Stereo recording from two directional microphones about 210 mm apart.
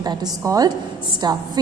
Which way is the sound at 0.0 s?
20° right (ahead or behind).